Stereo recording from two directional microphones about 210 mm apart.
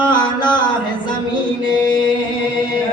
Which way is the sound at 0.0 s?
20° left (ahead or behind).